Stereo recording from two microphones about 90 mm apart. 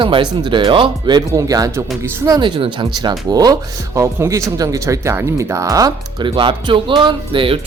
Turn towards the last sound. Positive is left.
turn(degrees=-75)  # may be behind; listen again after turning